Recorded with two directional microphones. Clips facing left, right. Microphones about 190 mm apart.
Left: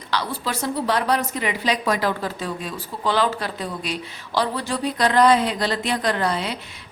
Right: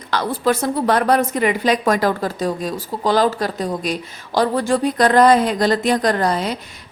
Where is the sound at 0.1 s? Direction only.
50° right (ahead or behind).